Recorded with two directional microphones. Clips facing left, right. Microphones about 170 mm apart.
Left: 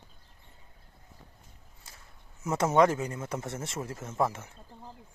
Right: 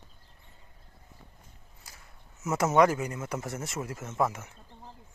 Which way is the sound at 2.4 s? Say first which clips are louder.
Even; 30° left (ahead or behind).